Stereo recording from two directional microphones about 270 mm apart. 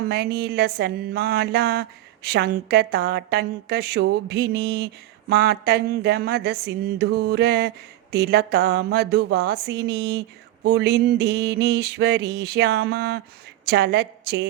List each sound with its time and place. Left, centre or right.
0.0 s a woman's voice: right